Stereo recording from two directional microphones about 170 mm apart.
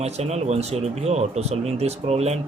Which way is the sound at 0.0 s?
40° right (ahead or behind).